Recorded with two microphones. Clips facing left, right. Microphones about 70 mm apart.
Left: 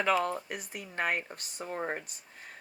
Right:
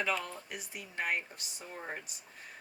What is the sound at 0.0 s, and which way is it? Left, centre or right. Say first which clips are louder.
Speech: left 7 dB; left.